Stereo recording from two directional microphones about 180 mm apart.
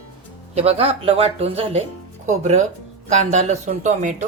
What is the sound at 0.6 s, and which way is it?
Speech, 35° right (ahead or behind).